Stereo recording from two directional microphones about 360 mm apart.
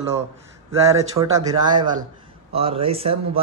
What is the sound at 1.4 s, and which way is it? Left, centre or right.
Speech, centre.